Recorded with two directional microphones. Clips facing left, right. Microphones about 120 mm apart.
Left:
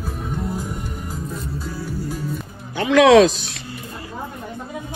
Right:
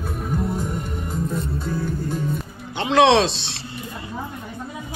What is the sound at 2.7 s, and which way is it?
Speech, 30° right (ahead or behind).